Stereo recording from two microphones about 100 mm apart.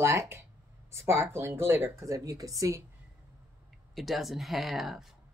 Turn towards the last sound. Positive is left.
turn(degrees=0)  # may be behind; listen again after turning